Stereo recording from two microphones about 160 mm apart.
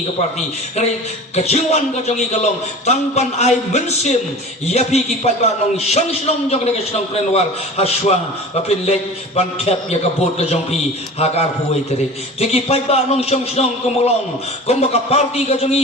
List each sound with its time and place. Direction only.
1.4 s a man's voice: 40° left (ahead or behind)